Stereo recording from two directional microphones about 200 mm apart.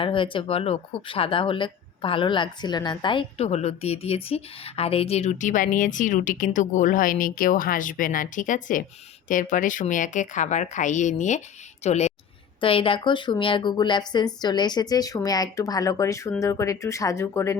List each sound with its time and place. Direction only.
0.0 s speech: 25° left (ahead or behind)